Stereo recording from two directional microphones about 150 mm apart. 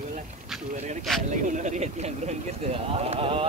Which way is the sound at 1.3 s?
55° right (ahead or behind).